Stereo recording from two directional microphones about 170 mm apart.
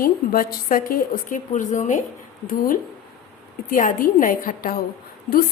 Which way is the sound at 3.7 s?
55° left (ahead or behind).